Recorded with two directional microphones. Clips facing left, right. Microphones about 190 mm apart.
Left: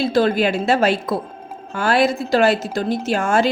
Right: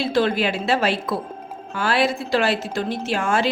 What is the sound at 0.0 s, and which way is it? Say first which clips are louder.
A woman's voice: left 3 dB; 40° left (ahead or behind).